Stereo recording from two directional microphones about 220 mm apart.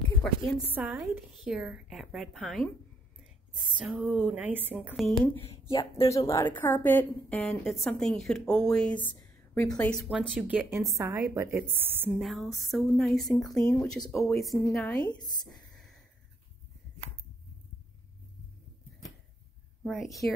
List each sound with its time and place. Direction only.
0.7 s a woman's voice: 10° right (ahead or behind)
5.4 s speech: 25° left (ahead or behind)
6.0 s a woman's voice: 15° left (ahead or behind)
15.0 s speech: 20° left (ahead or behind)
15.4 s a sound: centre (ahead or behind)
19.8 s a woman's voice: centre (ahead or behind)